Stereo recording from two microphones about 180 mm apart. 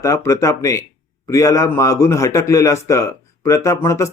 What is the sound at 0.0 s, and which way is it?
Speech, 15° left (ahead or behind).